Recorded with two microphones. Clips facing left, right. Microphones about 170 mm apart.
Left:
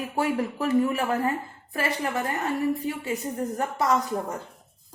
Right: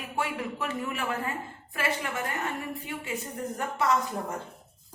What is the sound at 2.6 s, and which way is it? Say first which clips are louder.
A woman's voice: left 10 dB; 35° left (ahead or behind).